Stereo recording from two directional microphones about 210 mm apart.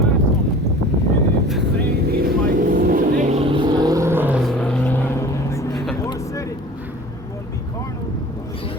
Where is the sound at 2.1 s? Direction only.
45° right (ahead or behind); by 4.4 s 10° right (ahead or behind).